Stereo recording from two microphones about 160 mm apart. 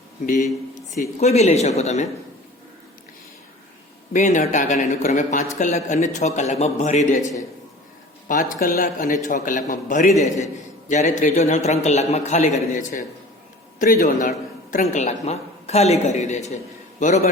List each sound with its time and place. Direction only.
0.3 s a man's voice: 50° left (ahead or behind)
4.1 s a man's voice: 50° left (ahead or behind)
8.3 s a man's voice: 55° left (ahead or behind)